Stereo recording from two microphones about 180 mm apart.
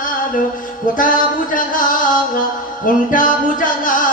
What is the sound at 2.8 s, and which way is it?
Music, 50° left (ahead or behind).